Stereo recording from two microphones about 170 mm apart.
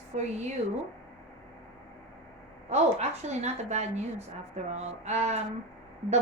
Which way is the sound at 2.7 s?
40° right (ahead or behind).